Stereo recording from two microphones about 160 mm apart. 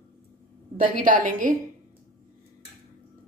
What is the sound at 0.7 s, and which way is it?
Speech, 55° right (ahead or behind).